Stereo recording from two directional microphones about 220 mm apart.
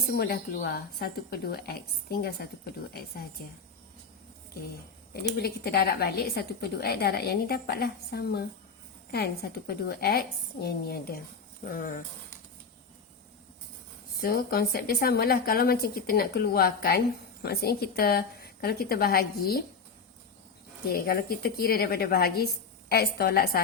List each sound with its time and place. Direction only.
0.1 s a woman's voice: 45° left (ahead or behind)
5.4 s a woman's voice: 45° left (ahead or behind)
14.2 s a woman's voice: 45° left (ahead or behind)
20.8 s a woman's voice: 45° left (ahead or behind)